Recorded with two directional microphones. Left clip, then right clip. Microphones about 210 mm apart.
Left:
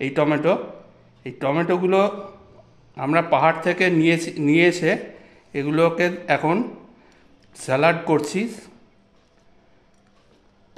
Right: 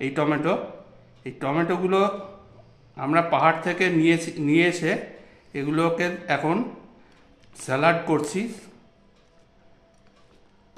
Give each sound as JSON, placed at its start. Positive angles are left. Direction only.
{"t": 0.0, "sound": "a man's voice", "side_deg": 30}